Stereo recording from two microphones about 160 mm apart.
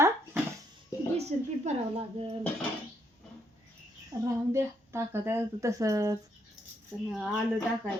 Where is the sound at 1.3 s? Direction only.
45° right (ahead or behind).